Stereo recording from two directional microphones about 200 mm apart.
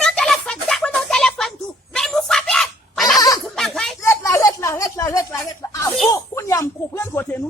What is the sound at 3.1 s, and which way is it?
Goat, 20° left (ahead or behind).